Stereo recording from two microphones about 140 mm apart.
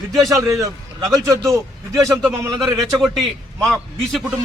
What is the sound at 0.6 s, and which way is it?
A man's voice, 25° right (ahead or behind).